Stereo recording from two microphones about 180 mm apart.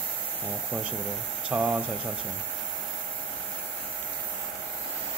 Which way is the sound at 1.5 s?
5° right (ahead or behind).